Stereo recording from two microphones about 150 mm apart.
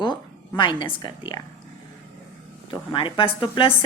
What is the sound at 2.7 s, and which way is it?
A woman's voice, 35° left (ahead or behind).